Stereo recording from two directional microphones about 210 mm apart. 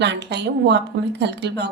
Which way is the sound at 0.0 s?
55° right (ahead or behind).